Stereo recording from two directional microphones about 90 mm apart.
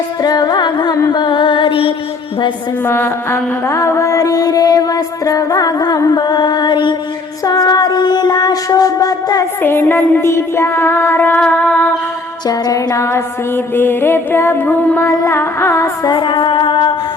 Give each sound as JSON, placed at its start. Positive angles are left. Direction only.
{"t": 0.2, "sound": "music", "side_deg": 45}
{"t": 1.1, "sound": "music", "side_deg": 65}
{"t": 2.8, "sound": "music", "side_deg": 25}
{"t": 7.4, "sound": "music", "side_deg": 45}
{"t": 9.6, "sound": "music", "side_deg": 25}
{"t": 12.5, "sound": "a sound", "side_deg": 45}
{"t": 13.7, "sound": "music", "side_deg": 25}
{"t": 15.1, "sound": "a sound", "side_deg": 30}
{"t": 16.0, "sound": "music", "side_deg": 60}